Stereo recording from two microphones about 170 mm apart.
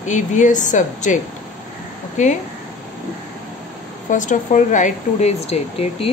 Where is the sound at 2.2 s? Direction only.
45° left (ahead or behind).